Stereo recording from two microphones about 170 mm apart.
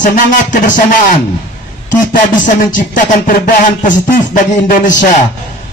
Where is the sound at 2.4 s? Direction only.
50° left (ahead or behind).